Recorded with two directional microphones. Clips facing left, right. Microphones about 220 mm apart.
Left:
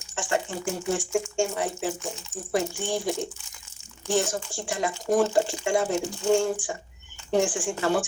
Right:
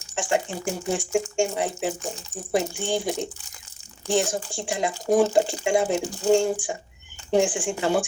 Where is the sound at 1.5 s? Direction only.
20° right (ahead or behind).